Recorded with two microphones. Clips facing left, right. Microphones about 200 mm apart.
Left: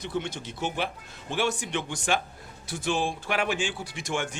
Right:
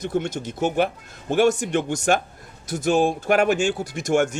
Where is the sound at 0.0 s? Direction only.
45° right (ahead or behind).